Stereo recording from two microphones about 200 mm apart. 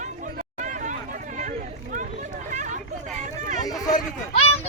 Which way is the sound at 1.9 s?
40° right (ahead or behind).